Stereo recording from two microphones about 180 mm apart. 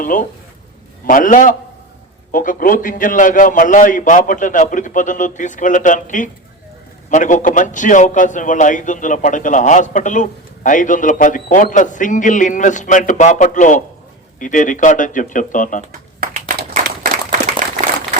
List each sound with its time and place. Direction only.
0.0 s a man's voice: 50° left (ahead or behind)
15.9 s clapping: 50° right (ahead or behind)